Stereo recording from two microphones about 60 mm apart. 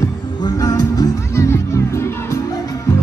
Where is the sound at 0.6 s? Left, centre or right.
Left.